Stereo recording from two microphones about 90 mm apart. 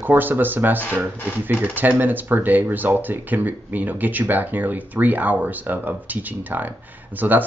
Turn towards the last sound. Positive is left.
turn(degrees=-20)  # may be behind; listen again after turning